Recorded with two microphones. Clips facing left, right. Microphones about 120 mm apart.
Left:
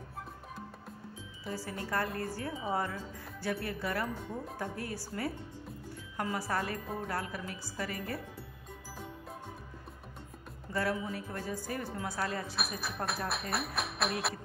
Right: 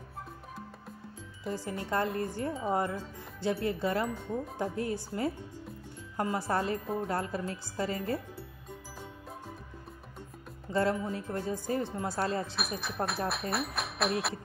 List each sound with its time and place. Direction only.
1.5 s speech: 20° right (ahead or behind)
10.7 s music: 25° right (ahead or behind)
11.1 s speech: 25° right (ahead or behind)
12.5 s speech: centre (ahead or behind)